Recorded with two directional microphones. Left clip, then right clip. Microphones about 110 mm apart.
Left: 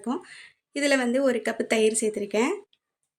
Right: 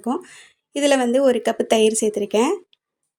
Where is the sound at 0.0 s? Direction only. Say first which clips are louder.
Right 6 dB; 40° right (ahead or behind).